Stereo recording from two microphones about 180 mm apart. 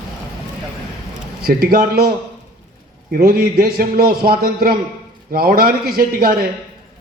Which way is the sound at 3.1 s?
55° right (ahead or behind).